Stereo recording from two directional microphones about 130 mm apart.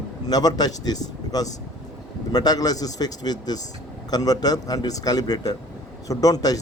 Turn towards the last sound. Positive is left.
turn(degrees=30)  # may be behind; listen again after turning